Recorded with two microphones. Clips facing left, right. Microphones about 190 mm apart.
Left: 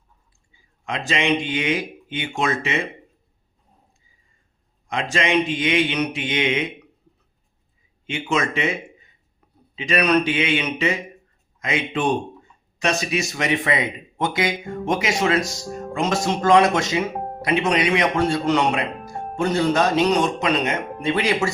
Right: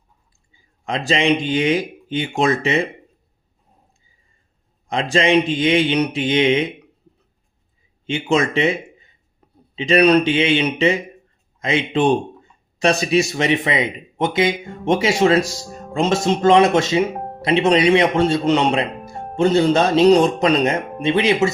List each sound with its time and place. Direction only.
0.9 s speech: 35° right (ahead or behind)
4.9 s speech: 30° right (ahead or behind)
8.0 s speech: 30° right (ahead or behind)
21.0 s speech: 20° right (ahead or behind)